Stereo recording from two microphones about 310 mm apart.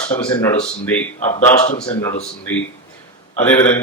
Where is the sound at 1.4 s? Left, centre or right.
Centre.